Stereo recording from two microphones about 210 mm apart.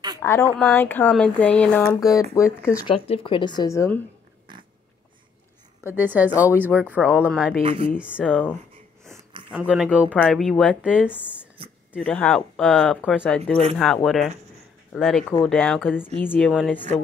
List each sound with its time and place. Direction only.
0.2 s speech: 10° left (ahead or behind)
2.0 s speech: 15° left (ahead or behind)
2.9 s speech: 25° left (ahead or behind)
5.9 s speech: 10° right (ahead or behind)
7.6 s speech: 25° right (ahead or behind)
8.0 s speech: 5° right (ahead or behind)
10.1 s speech: 5° left (ahead or behind)
11.6 s a sound: 25° right (ahead or behind)
12.0 s speech: 5° left (ahead or behind)